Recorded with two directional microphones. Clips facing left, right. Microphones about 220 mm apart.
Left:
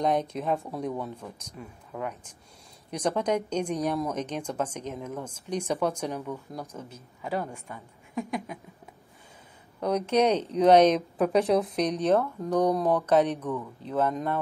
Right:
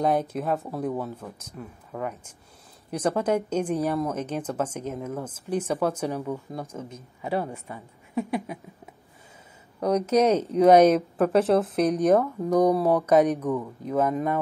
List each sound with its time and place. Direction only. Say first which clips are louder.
0.0 s speech: right 2 dB; 5° right (ahead or behind)
6.3 s speech: right 4 dB; 25° right (ahead or behind)
8.1 s speech: right 4 dB; 5° right (ahead or behind)
9.8 s speech: right 3 dB; 5° right (ahead or behind)